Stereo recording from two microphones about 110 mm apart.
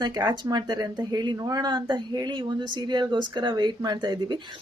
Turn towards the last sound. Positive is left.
turn(degrees=-40)  # may be behind; listen again after turning